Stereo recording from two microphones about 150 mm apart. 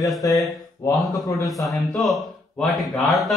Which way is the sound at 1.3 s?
Centre (ahead or behind).